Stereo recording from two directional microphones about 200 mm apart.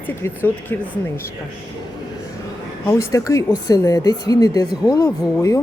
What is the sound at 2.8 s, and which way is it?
Speech, 15° left (ahead or behind).